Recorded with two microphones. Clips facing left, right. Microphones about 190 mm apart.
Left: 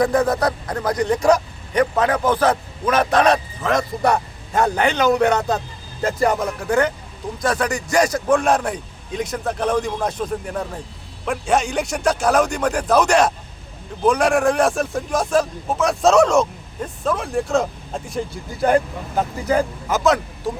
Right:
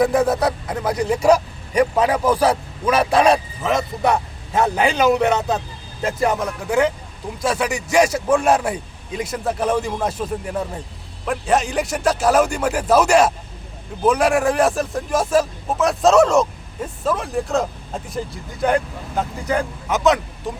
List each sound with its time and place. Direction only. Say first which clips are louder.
0.0 s a man's voice: right 1 dB; 5° right (ahead or behind)